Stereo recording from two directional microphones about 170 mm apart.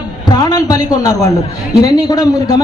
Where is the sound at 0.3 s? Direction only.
25° left (ahead or behind).